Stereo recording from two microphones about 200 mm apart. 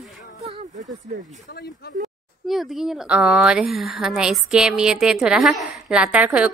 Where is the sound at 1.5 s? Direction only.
55° left (ahead or behind).